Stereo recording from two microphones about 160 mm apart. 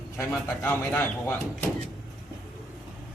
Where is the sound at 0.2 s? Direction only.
10° left (ahead or behind).